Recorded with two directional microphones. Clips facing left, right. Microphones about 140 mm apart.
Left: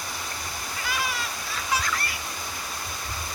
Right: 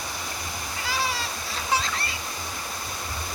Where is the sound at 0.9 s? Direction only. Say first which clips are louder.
Right 2 dB; 30° right (ahead or behind).